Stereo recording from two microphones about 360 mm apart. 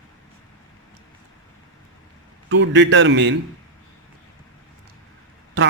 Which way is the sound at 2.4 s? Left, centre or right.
Right.